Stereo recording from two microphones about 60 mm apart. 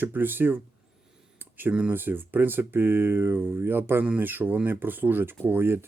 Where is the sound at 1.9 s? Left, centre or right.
Right.